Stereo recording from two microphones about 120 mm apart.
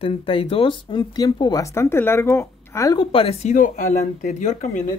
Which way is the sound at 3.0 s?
50° left (ahead or behind).